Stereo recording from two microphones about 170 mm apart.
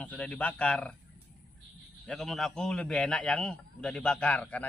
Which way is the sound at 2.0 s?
Centre (ahead or behind).